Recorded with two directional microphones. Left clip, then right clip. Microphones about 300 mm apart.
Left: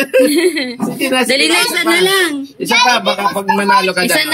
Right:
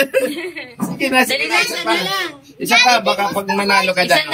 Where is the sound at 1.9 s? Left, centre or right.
Left.